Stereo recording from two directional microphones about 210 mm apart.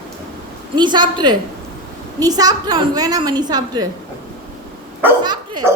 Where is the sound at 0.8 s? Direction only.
20° right (ahead or behind).